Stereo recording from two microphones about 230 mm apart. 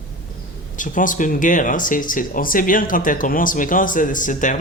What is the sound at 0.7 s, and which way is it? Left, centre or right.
Speech, left.